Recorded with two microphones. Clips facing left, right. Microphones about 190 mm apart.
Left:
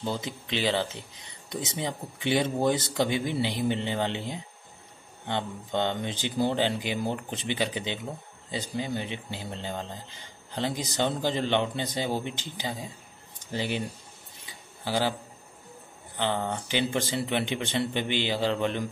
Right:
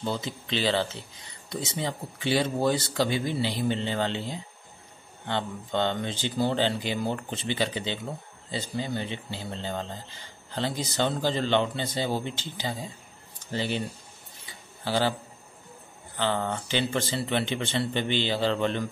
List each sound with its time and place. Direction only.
0.0 s a man's voice: 15° left (ahead or behind)
14.9 s a man's voice: 10° left (ahead or behind)
16.2 s a man's voice: 15° left (ahead or behind)